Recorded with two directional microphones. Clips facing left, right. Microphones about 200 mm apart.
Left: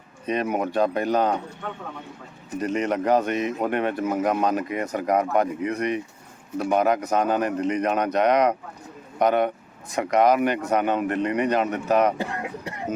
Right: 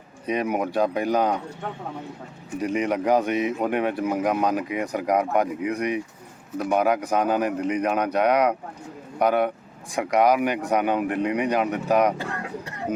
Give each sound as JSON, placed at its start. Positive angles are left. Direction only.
{"t": 0.3, "sound": "speech", "side_deg": -10}
{"t": 2.6, "sound": "speech", "side_deg": -10}
{"t": 12.1, "sound": "speech", "side_deg": 15}